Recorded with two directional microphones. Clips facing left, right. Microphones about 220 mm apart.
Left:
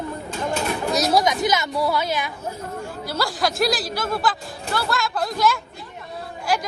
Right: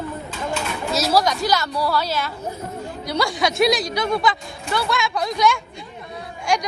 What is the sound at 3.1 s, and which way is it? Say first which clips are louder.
A woman's voice: right 3 dB; centre (ahead or behind).